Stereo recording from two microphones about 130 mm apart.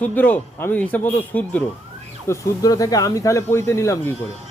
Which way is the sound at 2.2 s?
25° left (ahead or behind).